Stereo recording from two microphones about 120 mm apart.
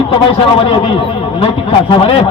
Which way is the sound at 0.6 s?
50° left (ahead or behind).